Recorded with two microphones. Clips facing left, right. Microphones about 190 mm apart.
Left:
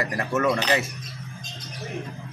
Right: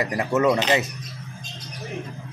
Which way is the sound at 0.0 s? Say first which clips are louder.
Right 3 dB; 20° right (ahead or behind).